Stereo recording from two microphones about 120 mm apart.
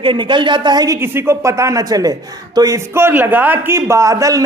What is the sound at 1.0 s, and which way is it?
A man's voice, 20° right (ahead or behind).